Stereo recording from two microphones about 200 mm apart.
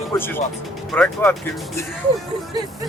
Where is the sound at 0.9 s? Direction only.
Centre (ahead or behind).